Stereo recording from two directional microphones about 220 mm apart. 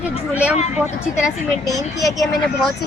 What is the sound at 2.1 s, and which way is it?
Speech, centre (ahead or behind).